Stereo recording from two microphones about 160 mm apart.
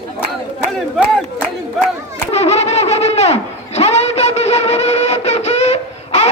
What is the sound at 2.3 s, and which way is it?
Bird, 40° left (ahead or behind).